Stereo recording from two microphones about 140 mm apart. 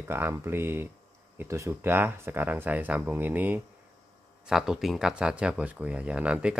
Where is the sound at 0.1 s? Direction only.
20° right (ahead or behind).